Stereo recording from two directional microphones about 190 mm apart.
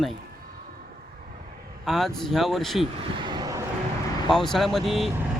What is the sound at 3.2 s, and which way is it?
Vehicle, 25° right (ahead or behind).